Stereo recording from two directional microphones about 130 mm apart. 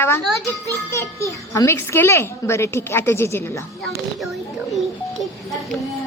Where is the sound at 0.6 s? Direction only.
20° left (ahead or behind).